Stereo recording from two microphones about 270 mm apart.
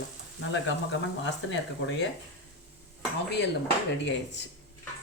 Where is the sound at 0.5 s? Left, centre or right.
Left.